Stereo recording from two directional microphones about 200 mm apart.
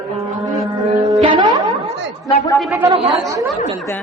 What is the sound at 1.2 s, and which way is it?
Music, 25° right (ahead or behind).